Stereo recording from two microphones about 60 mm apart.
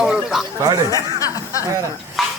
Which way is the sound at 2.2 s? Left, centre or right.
Centre.